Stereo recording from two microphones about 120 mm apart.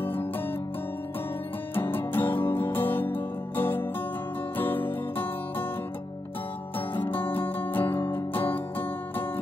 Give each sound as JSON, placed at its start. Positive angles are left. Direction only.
{"t": 0.0, "sound": "music", "side_deg": 20}
{"t": 1.8, "sound": "music", "side_deg": 15}
{"t": 6.9, "sound": "music", "side_deg": 15}